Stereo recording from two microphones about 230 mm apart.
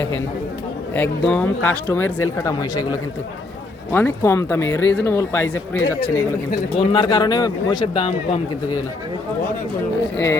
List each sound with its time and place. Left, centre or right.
0.9 s speech: centre
3.9 s speech: centre